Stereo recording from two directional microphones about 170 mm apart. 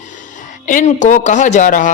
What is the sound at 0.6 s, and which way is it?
A man's voice, 50° left (ahead or behind).